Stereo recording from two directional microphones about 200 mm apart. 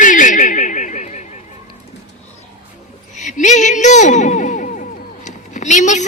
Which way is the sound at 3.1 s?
35° left (ahead or behind).